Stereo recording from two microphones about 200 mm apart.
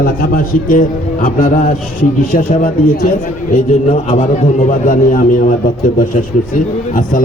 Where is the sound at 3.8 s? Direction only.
30° left (ahead or behind).